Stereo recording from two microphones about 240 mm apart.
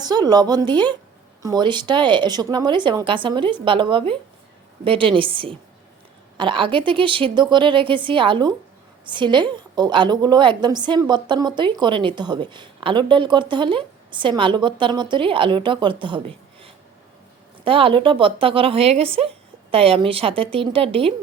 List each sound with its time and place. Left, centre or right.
0.0 s a woman's voice: centre